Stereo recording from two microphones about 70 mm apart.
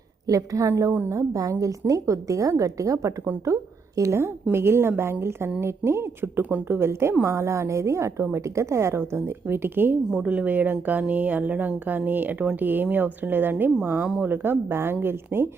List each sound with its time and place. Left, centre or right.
0.3 s a woman's voice: right
14.0 s speech: centre
14.3 s a woman's voice: right